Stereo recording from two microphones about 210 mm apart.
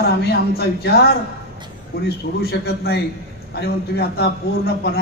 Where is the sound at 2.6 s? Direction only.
50° left (ahead or behind).